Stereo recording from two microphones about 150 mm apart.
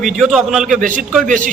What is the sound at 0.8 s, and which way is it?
Speech, 60° right (ahead or behind).